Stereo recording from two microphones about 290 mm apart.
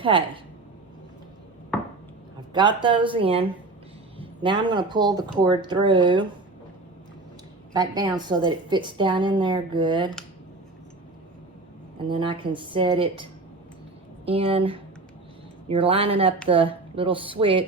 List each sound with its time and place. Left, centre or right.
2.5 s speech: centre
7.7 s speech: centre
11.9 s speech: centre
14.3 s speech: centre